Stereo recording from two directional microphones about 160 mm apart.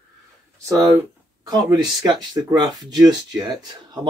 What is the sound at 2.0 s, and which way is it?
Speech, 25° right (ahead or behind).